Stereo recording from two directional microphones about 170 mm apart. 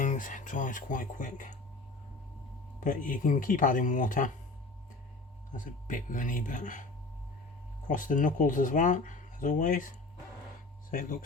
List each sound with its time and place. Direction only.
0.0 s speech: 50° left (ahead or behind)
2.8 s speech: 55° left (ahead or behind)
5.5 s speech: 50° left (ahead or behind)
7.9 s speech: 50° left (ahead or behind)
10.9 s speech: 55° left (ahead or behind)